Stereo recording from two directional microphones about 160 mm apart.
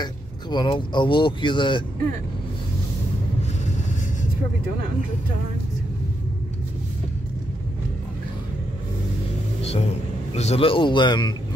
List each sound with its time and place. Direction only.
0.0 s speech: 25° left (ahead or behind)
9.6 s vehicle: 40° left (ahead or behind)
10.3 s speech: 40° left (ahead or behind)